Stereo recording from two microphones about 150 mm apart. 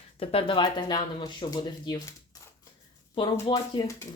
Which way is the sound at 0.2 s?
40° left (ahead or behind).